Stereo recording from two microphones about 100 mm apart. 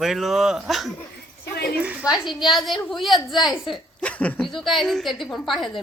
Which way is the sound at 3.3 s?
45° left (ahead or behind).